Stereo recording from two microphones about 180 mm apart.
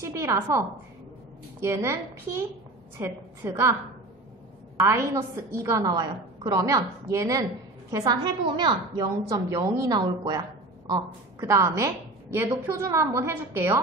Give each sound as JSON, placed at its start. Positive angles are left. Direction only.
{"t": 0.0, "sound": "a woman's voice", "side_deg": -15}
{"t": 4.8, "sound": "a woman's voice", "side_deg": -15}